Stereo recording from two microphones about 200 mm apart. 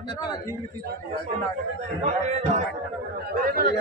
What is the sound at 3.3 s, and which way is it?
Speech, 45° right (ahead or behind).